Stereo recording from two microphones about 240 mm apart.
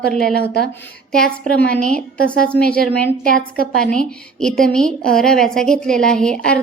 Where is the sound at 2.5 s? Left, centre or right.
Centre.